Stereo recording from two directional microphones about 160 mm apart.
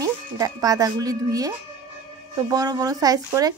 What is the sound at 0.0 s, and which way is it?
Speech, 20° right (ahead or behind).